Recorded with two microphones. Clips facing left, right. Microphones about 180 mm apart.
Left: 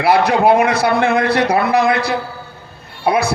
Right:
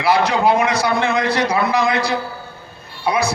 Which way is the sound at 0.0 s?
55° left (ahead or behind).